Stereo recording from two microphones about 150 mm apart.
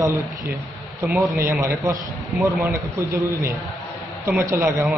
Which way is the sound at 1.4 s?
15° right (ahead or behind).